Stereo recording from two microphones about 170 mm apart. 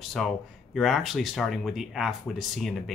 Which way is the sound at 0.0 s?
Centre (ahead or behind).